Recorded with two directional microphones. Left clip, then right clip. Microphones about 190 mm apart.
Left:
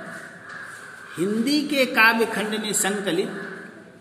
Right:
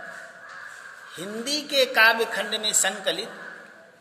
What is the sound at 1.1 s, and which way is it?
A man's voice, 55° right (ahead or behind).